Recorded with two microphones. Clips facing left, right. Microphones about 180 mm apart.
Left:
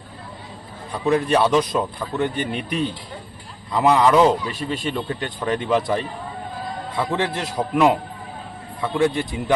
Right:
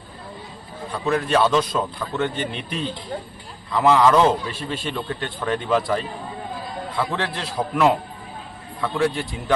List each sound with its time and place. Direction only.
1.0 s a man's voice: 15° left (ahead or behind)